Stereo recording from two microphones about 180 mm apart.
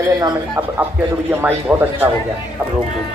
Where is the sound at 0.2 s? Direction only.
20° right (ahead or behind).